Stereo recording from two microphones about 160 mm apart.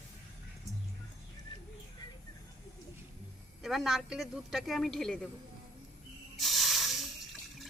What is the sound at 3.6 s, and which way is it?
A man's voice, centre (ahead or behind).